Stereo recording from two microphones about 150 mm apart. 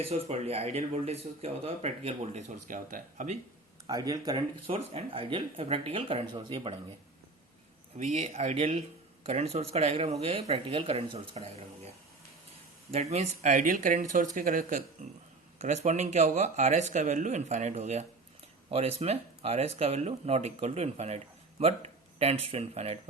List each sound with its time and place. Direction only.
0.0 s speech: 45° right (ahead or behind)
3.8 s speech: 25° right (ahead or behind)
4.6 s speech: 40° right (ahead or behind)
7.9 s speech: 55° right (ahead or behind)
12.9 s speech: 45° right (ahead or behind); by 14.8 s 65° right (ahead or behind)
15.5 s speech: 50° right (ahead or behind)